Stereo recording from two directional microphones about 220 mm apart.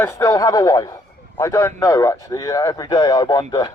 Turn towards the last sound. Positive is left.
turn(degrees=20)  # may be behind; listen again after turning